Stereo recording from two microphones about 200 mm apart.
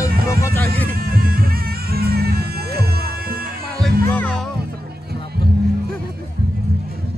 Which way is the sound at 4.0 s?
10° left (ahead or behind).